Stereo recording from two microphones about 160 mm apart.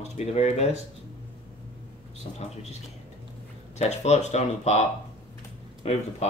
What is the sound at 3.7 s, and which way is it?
Speech, 45° left (ahead or behind).